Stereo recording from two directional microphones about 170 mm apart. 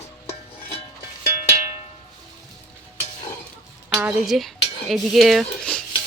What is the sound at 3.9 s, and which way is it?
Speech, 5° right (ahead or behind).